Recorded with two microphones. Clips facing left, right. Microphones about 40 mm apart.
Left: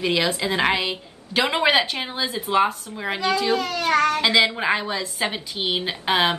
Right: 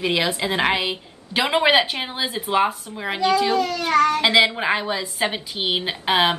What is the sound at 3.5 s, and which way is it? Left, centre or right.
Speech, centre.